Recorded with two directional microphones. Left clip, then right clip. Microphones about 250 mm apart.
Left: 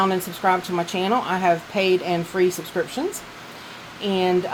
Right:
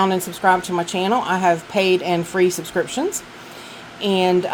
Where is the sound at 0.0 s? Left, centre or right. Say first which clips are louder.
Right 3 dB; centre.